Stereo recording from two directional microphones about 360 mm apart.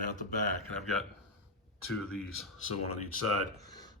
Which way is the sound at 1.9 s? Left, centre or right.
Centre.